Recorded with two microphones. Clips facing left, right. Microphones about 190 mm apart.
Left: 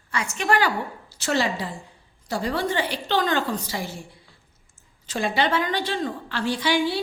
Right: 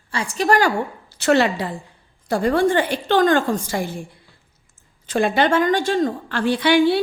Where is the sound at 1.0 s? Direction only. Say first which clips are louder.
Right 8 dB; 60° right (ahead or behind).